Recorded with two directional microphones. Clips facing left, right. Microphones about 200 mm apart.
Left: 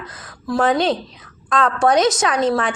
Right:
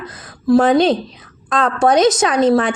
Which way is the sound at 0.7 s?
20° right (ahead or behind).